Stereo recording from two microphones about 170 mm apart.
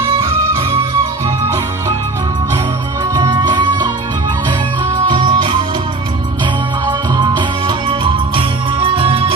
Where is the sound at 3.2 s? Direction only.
25° right (ahead or behind).